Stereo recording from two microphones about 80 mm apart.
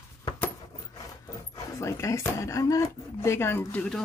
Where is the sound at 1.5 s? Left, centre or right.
Left.